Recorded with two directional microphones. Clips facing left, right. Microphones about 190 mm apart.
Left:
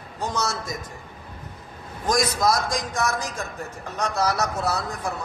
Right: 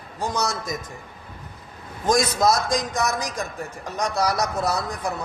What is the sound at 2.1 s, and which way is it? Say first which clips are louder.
A man's voice: right 2 dB; 25° right (ahead or behind).